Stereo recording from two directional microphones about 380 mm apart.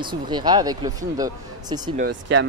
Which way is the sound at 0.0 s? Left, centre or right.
Centre.